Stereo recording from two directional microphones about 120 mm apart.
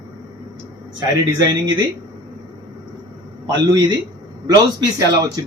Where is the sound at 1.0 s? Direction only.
35° right (ahead or behind).